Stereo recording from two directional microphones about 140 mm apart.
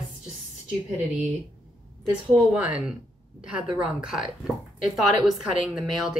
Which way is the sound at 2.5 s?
5° right (ahead or behind).